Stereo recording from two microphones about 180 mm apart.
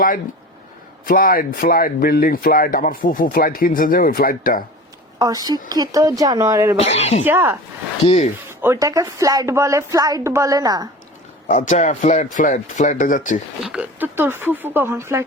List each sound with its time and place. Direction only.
1.0 s speech: 50° left (ahead or behind)
5.2 s a woman's voice: 20° right (ahead or behind)
6.7 s speech: 35° left (ahead or behind)
7.3 s speech: 10° right (ahead or behind)
8.0 s speech: 40° left (ahead or behind)
8.6 s a woman's voice: 15° right (ahead or behind)
11.4 s speech: 45° left (ahead or behind)
13.7 s speech: 10° right (ahead or behind)